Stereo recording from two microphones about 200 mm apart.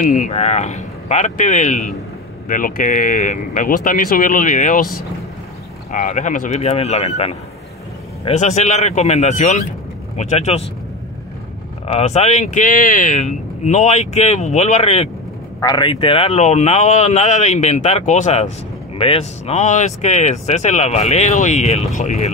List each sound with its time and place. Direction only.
0.0 s speech: 40° left (ahead or behind)
11.9 s speech: 35° left (ahead or behind)